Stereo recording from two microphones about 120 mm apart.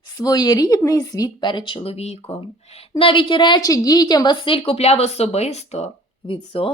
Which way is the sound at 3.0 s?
45° left (ahead or behind).